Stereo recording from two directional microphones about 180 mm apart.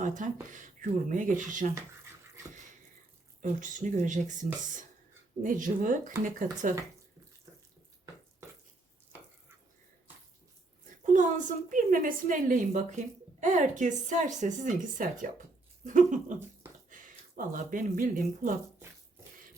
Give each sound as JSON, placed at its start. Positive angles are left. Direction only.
{"t": 0.0, "sound": "a woman's voice", "side_deg": -45}
{"t": 3.4, "sound": "a woman's voice", "side_deg": -45}
{"t": 5.4, "sound": "a woman's voice", "side_deg": -45}
{"t": 11.0, "sound": "a woman's voice", "side_deg": -45}